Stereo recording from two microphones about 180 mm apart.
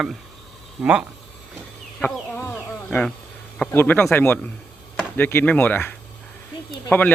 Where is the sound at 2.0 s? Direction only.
10° left (ahead or behind).